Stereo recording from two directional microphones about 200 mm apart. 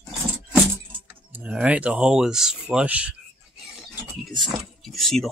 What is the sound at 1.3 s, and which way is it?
Speech, 5° right (ahead or behind).